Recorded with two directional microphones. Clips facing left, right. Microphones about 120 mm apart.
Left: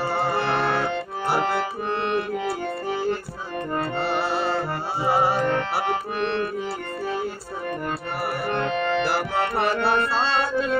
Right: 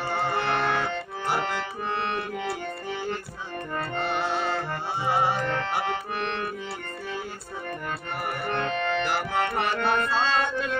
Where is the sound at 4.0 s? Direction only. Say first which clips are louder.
Left 1 dB; 35° left (ahead or behind).